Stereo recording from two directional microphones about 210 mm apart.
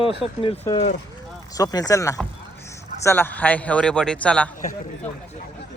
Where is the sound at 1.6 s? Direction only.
15° left (ahead or behind).